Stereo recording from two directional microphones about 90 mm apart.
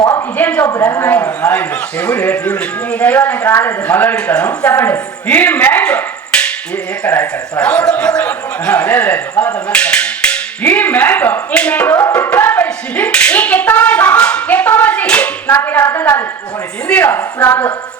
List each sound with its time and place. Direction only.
0.3 s a man's voice: 20° left (ahead or behind)
0.7 s a man's voice: 30° left (ahead or behind); by 15.3 s 15° left (ahead or behind)
15.4 s a man's voice: 25° left (ahead or behind)